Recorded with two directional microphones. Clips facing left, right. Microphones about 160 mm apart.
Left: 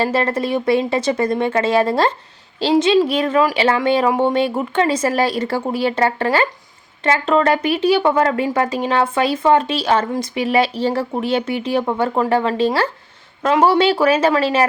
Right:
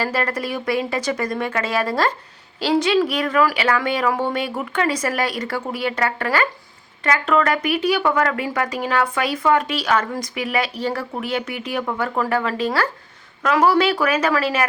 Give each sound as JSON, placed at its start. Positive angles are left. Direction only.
{"t": 0.0, "sound": "speech", "side_deg": 25}